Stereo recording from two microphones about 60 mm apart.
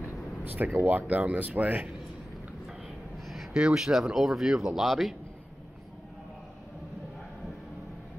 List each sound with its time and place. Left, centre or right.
0.5 s speech: right
3.3 s a sound: centre
3.6 s speech: centre